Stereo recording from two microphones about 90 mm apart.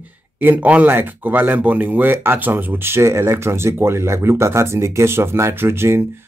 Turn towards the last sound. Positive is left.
turn(degrees=-30)  # may be behind; listen again after turning